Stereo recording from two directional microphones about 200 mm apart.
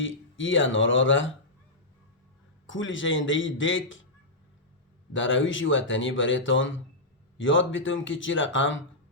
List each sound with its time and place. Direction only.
0.0 s speech: 70° left (ahead or behind)
2.6 s speech: 70° left (ahead or behind)
5.1 s speech: 70° left (ahead or behind)